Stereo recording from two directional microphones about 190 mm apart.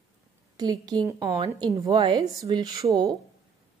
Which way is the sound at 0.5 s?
20° right (ahead or behind).